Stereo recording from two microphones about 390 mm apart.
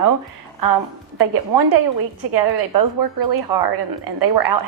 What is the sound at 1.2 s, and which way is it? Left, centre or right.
A woman's voice, right.